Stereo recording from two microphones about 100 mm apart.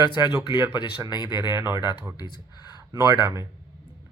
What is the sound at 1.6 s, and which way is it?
Speech, 20° right (ahead or behind).